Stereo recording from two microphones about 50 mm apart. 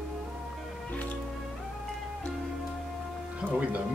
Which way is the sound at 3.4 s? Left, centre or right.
Right.